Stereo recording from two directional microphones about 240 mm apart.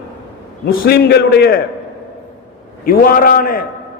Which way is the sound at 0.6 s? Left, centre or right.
Left.